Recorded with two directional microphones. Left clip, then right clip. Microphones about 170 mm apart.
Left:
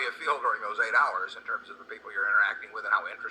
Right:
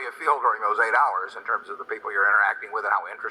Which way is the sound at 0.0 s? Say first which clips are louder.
Right 6 dB; 25° left (ahead or behind).